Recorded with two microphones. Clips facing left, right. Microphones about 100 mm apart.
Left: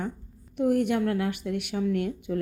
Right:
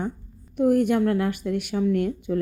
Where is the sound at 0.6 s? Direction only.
45° right (ahead or behind).